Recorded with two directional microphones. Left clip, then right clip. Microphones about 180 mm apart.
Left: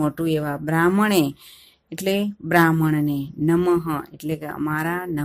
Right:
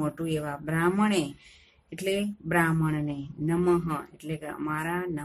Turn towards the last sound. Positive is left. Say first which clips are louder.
# left 6 dB
turn(degrees=40)  # may be behind; listen again after turning